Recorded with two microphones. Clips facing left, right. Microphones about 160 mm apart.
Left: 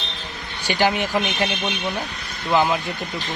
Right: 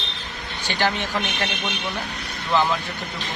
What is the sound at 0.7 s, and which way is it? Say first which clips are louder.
Speech: left 4 dB; 10° left (ahead or behind).